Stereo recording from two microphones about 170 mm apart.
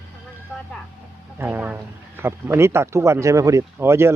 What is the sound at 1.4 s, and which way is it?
A man's voice, 10° right (ahead or behind).